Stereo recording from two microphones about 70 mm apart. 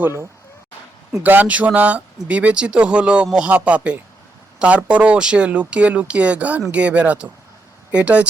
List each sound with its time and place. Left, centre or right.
1.2 s speech: right